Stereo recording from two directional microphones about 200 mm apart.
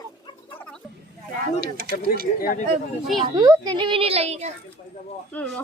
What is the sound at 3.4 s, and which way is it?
A woman's voice, 20° right (ahead or behind).